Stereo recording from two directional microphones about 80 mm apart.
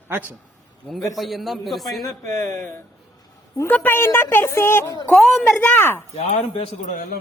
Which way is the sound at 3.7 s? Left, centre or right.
Left.